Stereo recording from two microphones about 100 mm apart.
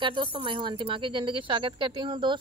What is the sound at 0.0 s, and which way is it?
A woman's voice, 55° right (ahead or behind).